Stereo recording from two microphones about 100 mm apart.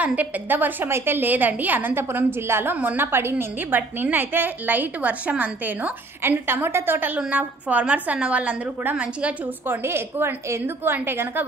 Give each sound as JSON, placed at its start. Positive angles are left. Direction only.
{"t": 0.0, "sound": "a woman's voice", "side_deg": -15}
{"t": 9.8, "sound": "a woman's voice", "side_deg": -25}